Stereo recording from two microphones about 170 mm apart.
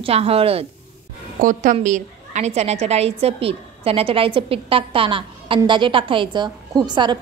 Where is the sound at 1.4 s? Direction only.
50° right (ahead or behind).